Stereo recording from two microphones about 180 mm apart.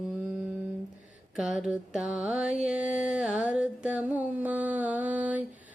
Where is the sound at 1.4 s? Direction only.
5° right (ahead or behind).